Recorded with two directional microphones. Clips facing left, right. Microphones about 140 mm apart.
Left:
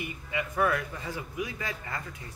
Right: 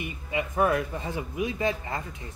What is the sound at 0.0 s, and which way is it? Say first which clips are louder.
A man's voice: right 3 dB; 25° right (ahead or behind).